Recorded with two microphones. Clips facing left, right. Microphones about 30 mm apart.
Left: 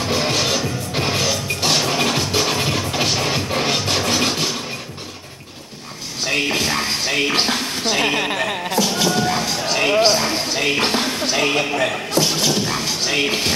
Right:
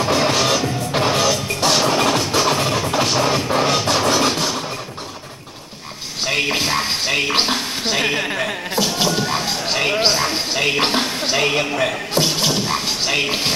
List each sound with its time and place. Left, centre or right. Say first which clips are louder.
0.0 s music: right 3 dB; centre
3.0 s scratching: right 3 dB; centre
6.2 s music: even; centre
7.9 s speech: left 1 dB; centre
8.8 s music: even; centre
9.9 s a sound: left 4 dB; centre
10.5 s music: right 1 dB; centre
11.3 s speech: right 1 dB; centre
12.4 s music: even; centre
13.1 s music: left 1 dB; centre